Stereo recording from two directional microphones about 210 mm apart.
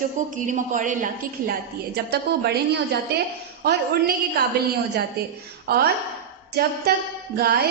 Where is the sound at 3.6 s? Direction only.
50° right (ahead or behind).